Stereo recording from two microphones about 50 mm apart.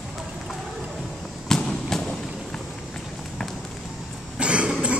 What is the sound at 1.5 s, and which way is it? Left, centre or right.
Fireworks, centre.